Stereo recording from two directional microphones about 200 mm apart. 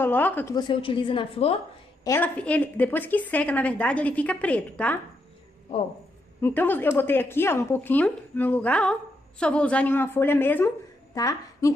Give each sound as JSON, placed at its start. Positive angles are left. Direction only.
{"t": 0.0, "sound": "a woman's voice", "side_deg": 10}
{"t": 0.6, "sound": "a woman's voice", "side_deg": 25}
{"t": 2.0, "sound": "a woman's voice", "side_deg": 10}
{"t": 6.4, "sound": "a woman's voice", "side_deg": 10}